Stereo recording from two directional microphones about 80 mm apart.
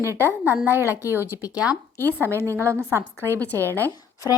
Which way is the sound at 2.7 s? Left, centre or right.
Right.